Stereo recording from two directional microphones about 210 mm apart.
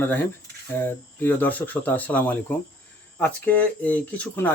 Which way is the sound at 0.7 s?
10° left (ahead or behind).